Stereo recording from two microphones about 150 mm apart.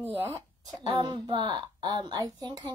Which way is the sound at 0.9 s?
30° right (ahead or behind).